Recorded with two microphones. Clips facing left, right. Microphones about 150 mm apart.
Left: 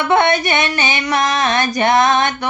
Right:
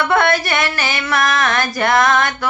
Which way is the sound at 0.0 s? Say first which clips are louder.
Left 1 dB; 20° left (ahead or behind).